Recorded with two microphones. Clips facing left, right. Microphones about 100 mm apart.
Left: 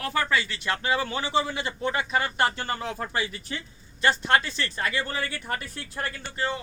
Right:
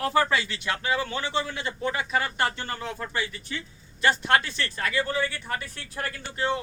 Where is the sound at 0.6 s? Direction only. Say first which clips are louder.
Left 1 dB; 10° right (ahead or behind).